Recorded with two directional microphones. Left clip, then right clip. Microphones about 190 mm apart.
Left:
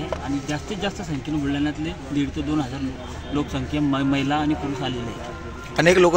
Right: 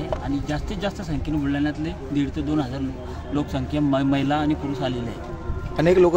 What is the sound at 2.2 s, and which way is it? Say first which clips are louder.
A man's voice: even; 15° right (ahead or behind).